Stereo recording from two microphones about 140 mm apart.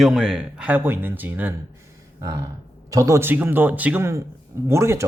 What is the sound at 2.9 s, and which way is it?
A man's voice, 20° right (ahead or behind).